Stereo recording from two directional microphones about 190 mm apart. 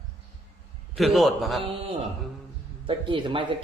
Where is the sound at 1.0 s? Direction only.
Centre (ahead or behind).